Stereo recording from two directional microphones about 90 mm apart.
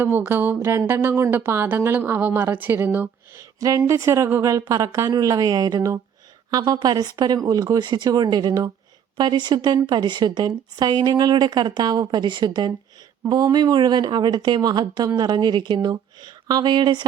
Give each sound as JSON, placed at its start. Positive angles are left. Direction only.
{"t": 0.0, "sound": "speech", "side_deg": -25}
{"t": 3.3, "sound": "a woman's voice", "side_deg": -40}